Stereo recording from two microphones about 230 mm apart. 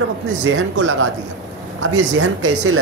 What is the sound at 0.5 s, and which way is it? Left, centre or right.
A woman's voice, right.